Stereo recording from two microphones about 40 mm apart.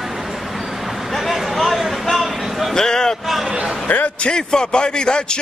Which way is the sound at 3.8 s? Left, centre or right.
Left.